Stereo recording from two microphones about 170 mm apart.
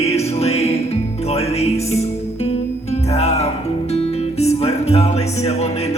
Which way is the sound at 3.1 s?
40° left (ahead or behind).